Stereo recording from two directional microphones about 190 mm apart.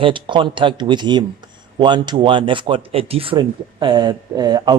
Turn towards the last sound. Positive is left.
turn(degrees=-20)  # may be behind; listen again after turning